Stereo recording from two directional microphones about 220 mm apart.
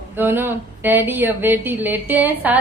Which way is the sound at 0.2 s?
10° right (ahead or behind).